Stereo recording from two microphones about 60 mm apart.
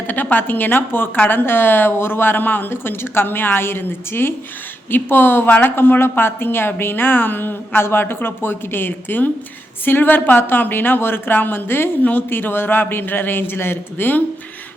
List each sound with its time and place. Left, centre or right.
0.1 s a woman's voice: left